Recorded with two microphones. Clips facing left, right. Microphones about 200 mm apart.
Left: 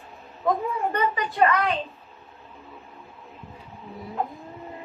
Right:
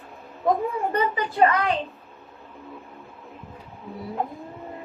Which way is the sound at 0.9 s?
30° right (ahead or behind).